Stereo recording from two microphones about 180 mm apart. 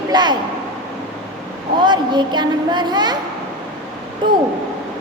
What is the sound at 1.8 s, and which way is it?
A woman's voice, 25° right (ahead or behind).